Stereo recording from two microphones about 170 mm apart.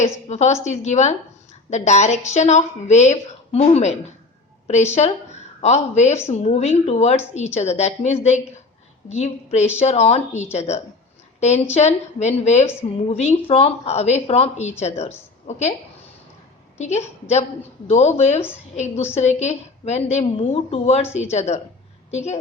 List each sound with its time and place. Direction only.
0.0 s a woman's voice: 40° left (ahead or behind)
16.7 s a woman's voice: 40° left (ahead or behind)